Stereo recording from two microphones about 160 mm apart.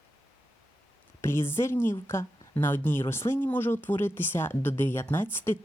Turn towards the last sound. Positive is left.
turn(degrees=15)  # may be behind; listen again after turning